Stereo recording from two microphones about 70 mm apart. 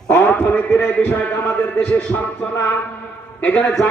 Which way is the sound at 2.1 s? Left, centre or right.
Left.